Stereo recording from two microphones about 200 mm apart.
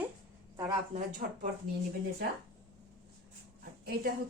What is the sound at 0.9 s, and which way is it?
Speech, 40° right (ahead or behind).